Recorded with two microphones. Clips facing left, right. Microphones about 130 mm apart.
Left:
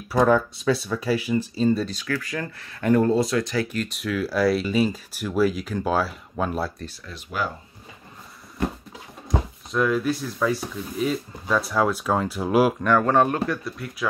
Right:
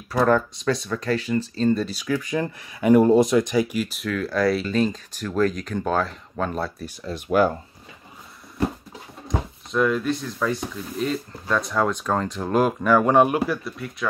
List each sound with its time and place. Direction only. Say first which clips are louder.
0.1 s speech: left 1 dB; 10° left (ahead or behind)
1.9 s speech: right 3 dB; 10° right (ahead or behind); by 6.7 s 5° left (ahead or behind)
7.1 s speech: right 9 dB; 40° right (ahead or behind)
9.3 s speech: even; centre (ahead or behind)
12.8 s speech: right 2 dB; 10° right (ahead or behind)